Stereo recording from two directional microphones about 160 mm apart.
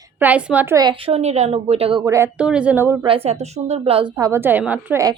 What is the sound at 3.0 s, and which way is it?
A woman's voice, 35° right (ahead or behind).